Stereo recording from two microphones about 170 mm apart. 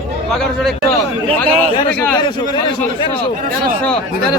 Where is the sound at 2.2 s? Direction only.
25° left (ahead or behind).